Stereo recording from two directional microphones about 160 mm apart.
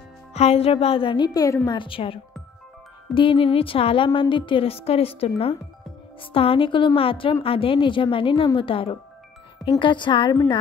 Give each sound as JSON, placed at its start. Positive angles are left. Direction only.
{"t": 0.3, "sound": "a woman's voice", "side_deg": 40}
{"t": 3.2, "sound": "a woman's voice", "side_deg": 35}